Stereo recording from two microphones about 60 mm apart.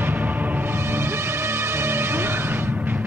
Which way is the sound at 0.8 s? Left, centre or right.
Right.